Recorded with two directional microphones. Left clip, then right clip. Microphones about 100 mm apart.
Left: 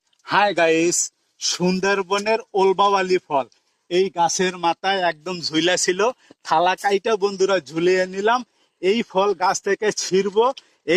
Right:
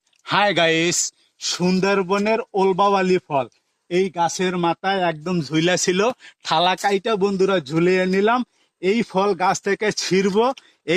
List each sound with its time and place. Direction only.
0.3 s speech: 40° right (ahead or behind)
1.4 s a man's voice: 30° right (ahead or behind)
6.7 s a man's voice: 30° right (ahead or behind)